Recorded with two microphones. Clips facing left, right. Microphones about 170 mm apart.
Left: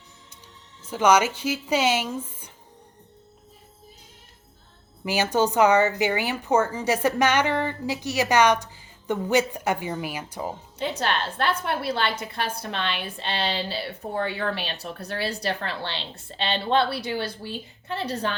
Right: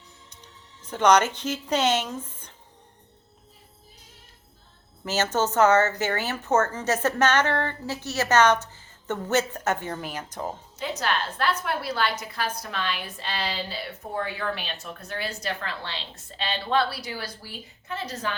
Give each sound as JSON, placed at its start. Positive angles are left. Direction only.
{"t": 0.3, "sound": "speech", "side_deg": 10}
{"t": 5.0, "sound": "a woman's voice", "side_deg": 10}
{"t": 10.8, "sound": "a woman's voice", "side_deg": 30}